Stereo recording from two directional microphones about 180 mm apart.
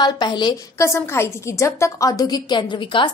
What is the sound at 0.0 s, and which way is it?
A woman's voice, 25° left (ahead or behind).